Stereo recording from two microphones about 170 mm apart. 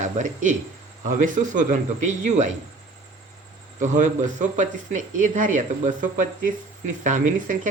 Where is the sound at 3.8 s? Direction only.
45° right (ahead or behind).